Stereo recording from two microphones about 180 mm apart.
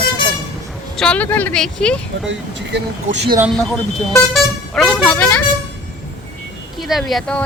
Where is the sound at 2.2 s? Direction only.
80° right.